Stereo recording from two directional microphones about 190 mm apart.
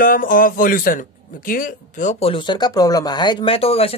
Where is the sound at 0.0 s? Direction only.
45° left (ahead or behind).